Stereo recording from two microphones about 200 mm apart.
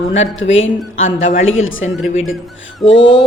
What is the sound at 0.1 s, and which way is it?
Speech, 35° left (ahead or behind).